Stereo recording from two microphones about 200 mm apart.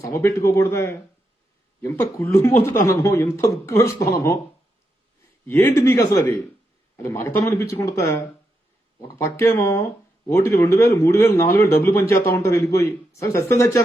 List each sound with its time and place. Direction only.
0.0 s speech: 15° left (ahead or behind)
5.5 s speech: 10° left (ahead or behind)